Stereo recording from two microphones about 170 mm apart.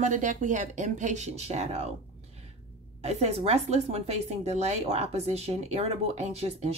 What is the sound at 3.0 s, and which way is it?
A woman's voice, 40° right (ahead or behind).